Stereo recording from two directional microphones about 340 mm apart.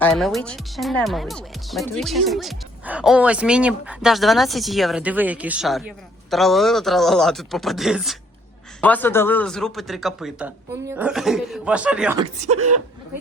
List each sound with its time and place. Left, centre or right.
0.0 s speech: centre
12.2 s speech: centre